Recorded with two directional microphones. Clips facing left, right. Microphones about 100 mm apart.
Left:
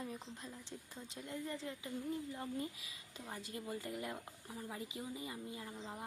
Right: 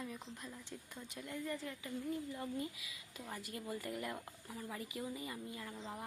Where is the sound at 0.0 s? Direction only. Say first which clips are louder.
Even; 35° left (ahead or behind).